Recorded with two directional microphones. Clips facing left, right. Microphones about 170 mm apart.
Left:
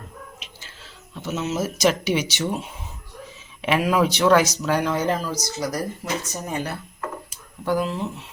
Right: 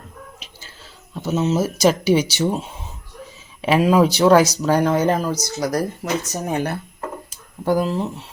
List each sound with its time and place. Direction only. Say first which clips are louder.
1.2 s speech: right 6 dB; 30° right (ahead or behind); by 6.7 s 60° right (ahead or behind)
7.6 s speech: right 4 dB; 40° right (ahead or behind)